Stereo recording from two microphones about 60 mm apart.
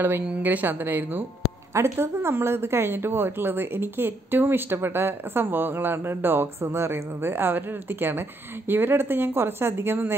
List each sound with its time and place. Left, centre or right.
0.4 s a woman's voice: right
1.7 s a woman's voice: right